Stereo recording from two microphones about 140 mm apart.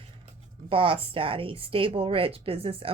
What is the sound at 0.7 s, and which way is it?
A woman's voice, 40° right (ahead or behind).